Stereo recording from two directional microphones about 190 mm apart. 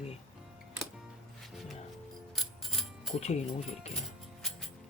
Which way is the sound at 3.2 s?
35° left (ahead or behind).